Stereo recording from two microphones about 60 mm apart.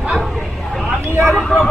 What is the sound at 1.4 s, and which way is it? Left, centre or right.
Speech, centre.